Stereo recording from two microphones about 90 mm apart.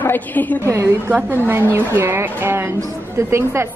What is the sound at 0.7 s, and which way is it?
A woman's voice, 30° right (ahead or behind).